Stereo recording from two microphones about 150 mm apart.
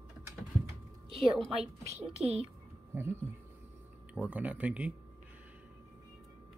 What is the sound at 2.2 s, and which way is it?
Speech, 45° right (ahead or behind).